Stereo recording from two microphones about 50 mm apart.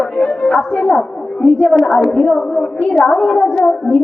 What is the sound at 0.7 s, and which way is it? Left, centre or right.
A man's voice, centre.